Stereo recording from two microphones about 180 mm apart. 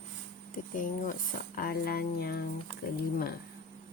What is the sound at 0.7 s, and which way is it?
Speech, 45° left (ahead or behind).